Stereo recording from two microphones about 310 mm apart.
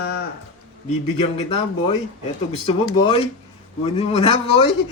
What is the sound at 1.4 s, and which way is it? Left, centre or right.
A man's voice, centre.